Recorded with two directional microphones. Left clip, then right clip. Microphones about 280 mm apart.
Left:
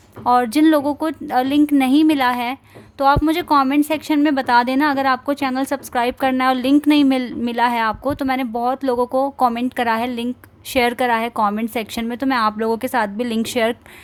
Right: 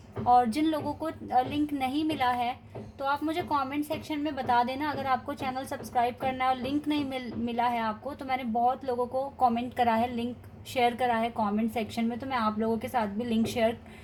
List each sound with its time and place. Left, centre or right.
0.3 s a woman's voice: left